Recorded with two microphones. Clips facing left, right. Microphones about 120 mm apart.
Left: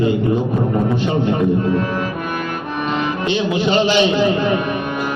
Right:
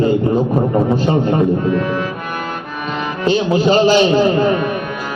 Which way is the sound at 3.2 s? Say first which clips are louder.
Right 6 dB; 40° right (ahead or behind).